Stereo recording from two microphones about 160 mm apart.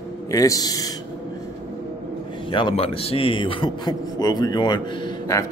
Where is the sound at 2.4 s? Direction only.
30° left (ahead or behind).